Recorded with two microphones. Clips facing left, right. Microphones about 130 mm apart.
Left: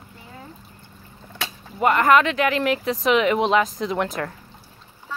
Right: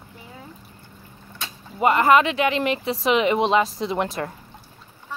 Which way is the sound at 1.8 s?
Centre (ahead or behind).